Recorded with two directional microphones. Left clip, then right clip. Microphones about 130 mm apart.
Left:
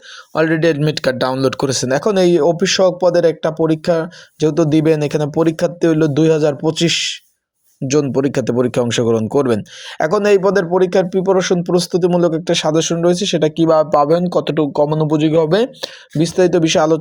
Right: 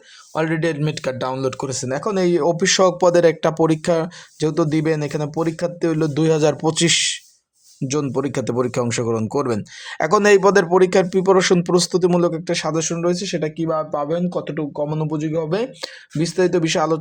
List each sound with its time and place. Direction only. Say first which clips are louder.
0.3 s speech: left 6 dB; 25° left (ahead or behind)
2.4 s speech: left 3 dB; 10° left (ahead or behind)
6.4 s a man's voice: left 2 dB; centre (ahead or behind)
8.0 s speech: left 5 dB; 15° left (ahead or behind)
10.1 s a man's voice: even; 5° right (ahead or behind)
12.3 s speech: left 6 dB; 20° left (ahead or behind)
13.6 s speech: left 12 dB; 40° left (ahead or behind); by 17.0 s 15° left (ahead or behind)